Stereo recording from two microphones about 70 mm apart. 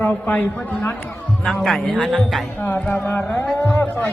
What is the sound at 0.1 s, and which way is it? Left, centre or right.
Speech, left.